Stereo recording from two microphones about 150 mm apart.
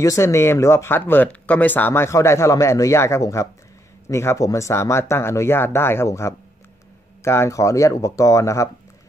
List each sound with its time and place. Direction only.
0.0 s speech: 20° left (ahead or behind)